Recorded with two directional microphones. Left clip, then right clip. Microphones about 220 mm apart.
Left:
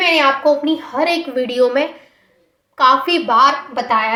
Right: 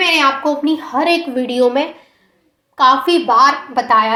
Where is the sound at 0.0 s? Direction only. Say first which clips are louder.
Even; 30° right (ahead or behind).